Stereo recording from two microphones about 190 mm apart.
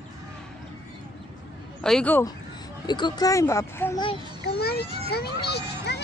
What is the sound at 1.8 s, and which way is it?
Speech, 5° left (ahead or behind).